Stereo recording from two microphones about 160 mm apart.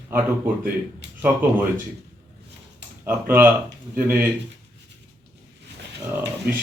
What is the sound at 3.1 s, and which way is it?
Speech, 15° right (ahead or behind).